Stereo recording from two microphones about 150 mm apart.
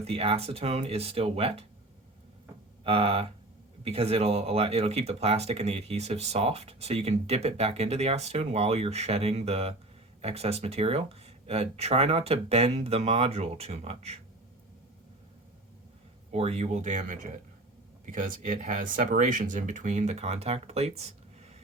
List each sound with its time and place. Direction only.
0.0 s speech: 40° right (ahead or behind)
2.8 s speech: 40° right (ahead or behind)
16.3 s speech: 45° right (ahead or behind)